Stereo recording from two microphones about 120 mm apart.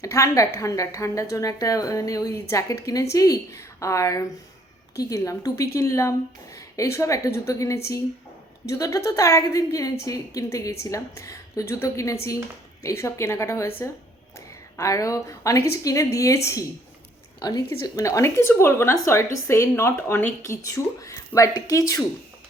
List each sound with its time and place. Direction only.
0.0 s a woman's voice: 25° left (ahead or behind)
17.7 s a woman's voice: 25° left (ahead or behind)